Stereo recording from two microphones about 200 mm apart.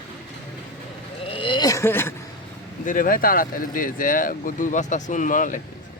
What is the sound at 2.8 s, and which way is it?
Speech, 45° left (ahead or behind).